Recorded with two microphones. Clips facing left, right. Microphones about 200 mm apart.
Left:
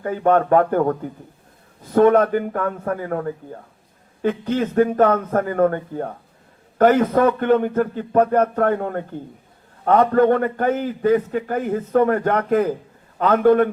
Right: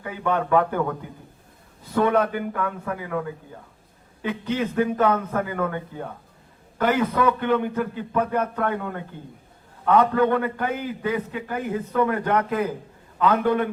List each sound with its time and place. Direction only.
0.0 s a man's voice: 45° left (ahead or behind)